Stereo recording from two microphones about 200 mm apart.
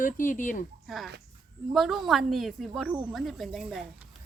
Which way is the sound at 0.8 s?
Centre (ahead or behind).